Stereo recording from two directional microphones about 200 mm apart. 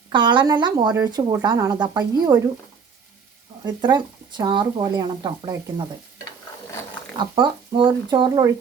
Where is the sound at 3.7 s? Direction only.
20° right (ahead or behind).